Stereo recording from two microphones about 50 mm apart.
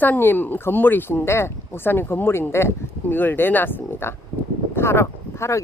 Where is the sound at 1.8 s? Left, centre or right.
Left.